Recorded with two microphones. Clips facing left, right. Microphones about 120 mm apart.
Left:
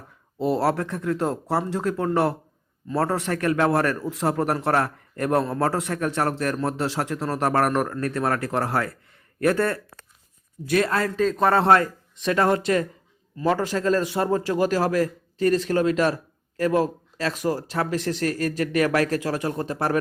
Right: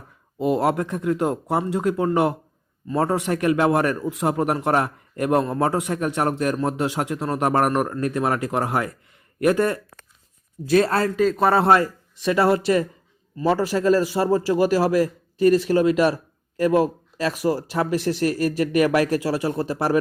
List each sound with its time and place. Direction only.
0.3 s a man's voice: 15° right (ahead or behind)
10.7 s a man's voice: 30° right (ahead or behind)
11.2 s a man's voice: 5° right (ahead or behind)